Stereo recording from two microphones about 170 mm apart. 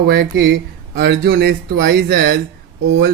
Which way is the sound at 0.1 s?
70° right (ahead or behind).